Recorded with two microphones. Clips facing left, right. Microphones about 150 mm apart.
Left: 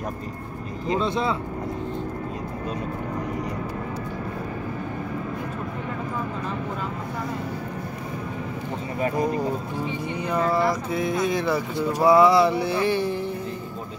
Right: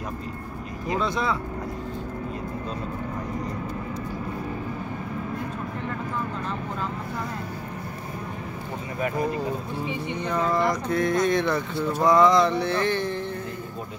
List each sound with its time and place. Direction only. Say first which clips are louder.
0.8 s speech: left 2 dB; 25° left (ahead or behind)
10.1 s speech: left 2 dB; 10° left (ahead or behind)